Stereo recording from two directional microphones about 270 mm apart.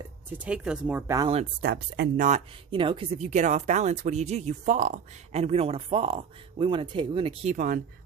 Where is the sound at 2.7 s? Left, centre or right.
Centre.